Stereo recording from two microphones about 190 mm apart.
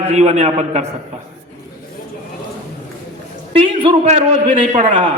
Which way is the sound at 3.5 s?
30° right (ahead or behind).